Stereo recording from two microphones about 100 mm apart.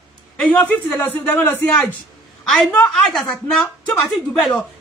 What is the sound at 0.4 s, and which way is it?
Speech, 15° left (ahead or behind).